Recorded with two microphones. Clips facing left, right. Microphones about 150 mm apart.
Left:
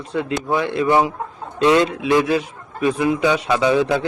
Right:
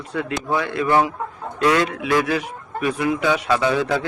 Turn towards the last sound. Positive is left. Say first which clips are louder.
# left 3 dB
turn(degrees=20)  # may be behind; listen again after turning